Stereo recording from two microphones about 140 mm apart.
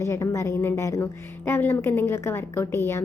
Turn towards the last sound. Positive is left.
turn(degrees=20)  # may be behind; listen again after turning